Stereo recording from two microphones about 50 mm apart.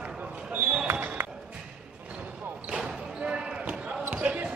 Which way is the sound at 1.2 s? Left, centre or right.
Right.